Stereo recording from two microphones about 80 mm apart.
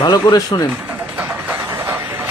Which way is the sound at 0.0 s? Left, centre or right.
Left.